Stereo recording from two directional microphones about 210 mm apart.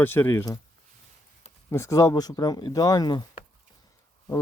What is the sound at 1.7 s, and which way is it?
Speech, 15° left (ahead or behind).